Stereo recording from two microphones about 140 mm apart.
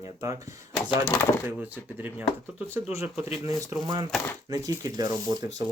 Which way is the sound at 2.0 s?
15° right (ahead or behind).